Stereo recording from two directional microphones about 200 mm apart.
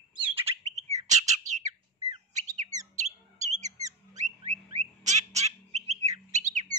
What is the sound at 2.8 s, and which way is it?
Bird, 35° right (ahead or behind).